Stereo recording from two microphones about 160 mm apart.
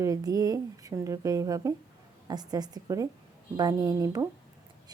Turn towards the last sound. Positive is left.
turn(degrees=-20)  # may be behind; listen again after turning